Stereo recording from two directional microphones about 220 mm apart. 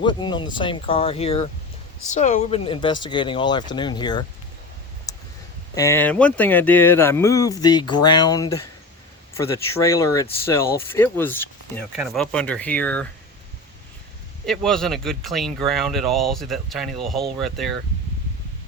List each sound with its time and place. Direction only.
0.0 s speech: 20° left (ahead or behind)
5.1 s a sound: 15° left (ahead or behind)
5.7 s speech: 15° left (ahead or behind)
14.4 s speech: centre (ahead or behind)